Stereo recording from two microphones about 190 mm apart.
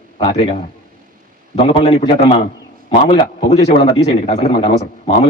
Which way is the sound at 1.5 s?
30° left (ahead or behind).